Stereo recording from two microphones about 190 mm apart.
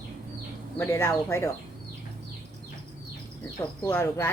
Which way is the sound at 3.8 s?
15° left (ahead or behind).